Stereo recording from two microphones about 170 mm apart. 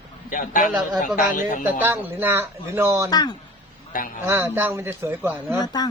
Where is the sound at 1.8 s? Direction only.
10° right (ahead or behind).